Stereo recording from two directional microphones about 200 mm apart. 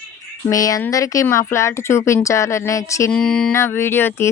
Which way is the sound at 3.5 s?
15° left (ahead or behind).